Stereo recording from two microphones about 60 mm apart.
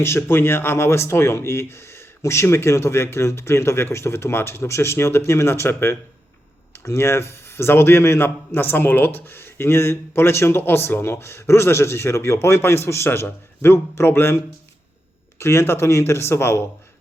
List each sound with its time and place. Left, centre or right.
0.0 s a man's voice: left